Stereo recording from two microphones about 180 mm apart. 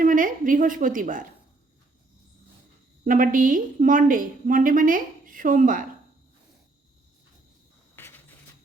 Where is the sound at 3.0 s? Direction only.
45° right (ahead or behind).